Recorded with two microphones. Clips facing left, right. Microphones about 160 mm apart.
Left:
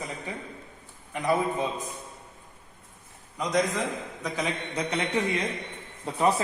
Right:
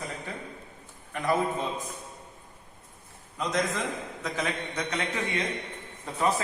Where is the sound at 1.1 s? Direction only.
15° left (ahead or behind).